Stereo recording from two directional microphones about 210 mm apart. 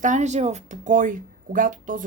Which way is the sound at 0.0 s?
35° right (ahead or behind).